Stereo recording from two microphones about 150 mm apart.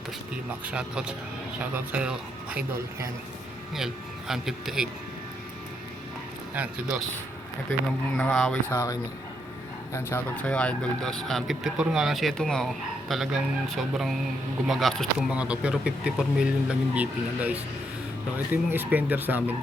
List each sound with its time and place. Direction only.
0.6 s speech: 5° right (ahead or behind)
3.8 s speech: centre (ahead or behind)
6.5 s speech: 5° right (ahead or behind)
7.7 s speech: 5° left (ahead or behind)
8.7 s speech: 20° left (ahead or behind); by 19.5 s 10° right (ahead or behind)